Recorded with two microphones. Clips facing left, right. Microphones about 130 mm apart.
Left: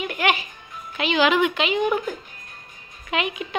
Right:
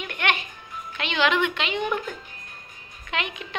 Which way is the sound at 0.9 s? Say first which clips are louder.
Left 4 dB; 10° left (ahead or behind).